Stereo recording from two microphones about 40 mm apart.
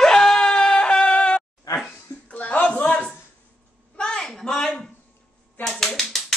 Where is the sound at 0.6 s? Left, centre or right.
Left.